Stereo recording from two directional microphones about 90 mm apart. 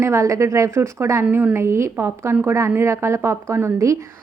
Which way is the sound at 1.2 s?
20° right (ahead or behind).